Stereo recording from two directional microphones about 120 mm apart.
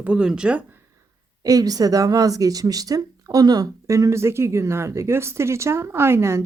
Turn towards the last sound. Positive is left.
turn(degrees=-20)  # may be behind; listen again after turning